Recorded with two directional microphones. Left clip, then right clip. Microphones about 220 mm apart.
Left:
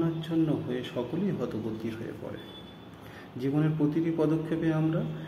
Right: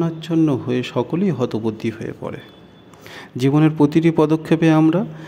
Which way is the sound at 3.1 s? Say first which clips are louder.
Right 12 dB; 45° right (ahead or behind).